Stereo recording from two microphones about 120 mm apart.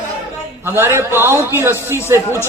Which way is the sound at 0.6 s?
20° right (ahead or behind).